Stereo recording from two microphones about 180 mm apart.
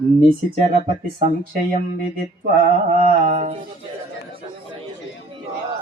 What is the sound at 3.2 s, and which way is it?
Speech, 40° right (ahead or behind).